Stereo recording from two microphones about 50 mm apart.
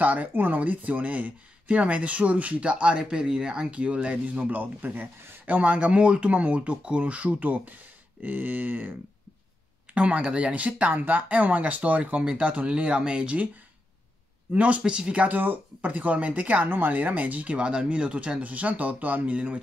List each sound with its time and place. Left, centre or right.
0.0 s speech: right
9.9 s speech: right
14.5 s speech: right
15.2 s speech: right
19.3 s speech: right